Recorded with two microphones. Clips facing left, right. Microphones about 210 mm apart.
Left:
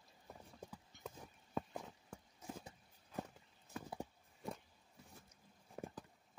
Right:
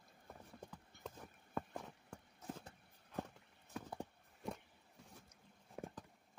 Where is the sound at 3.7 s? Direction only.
5° left (ahead or behind).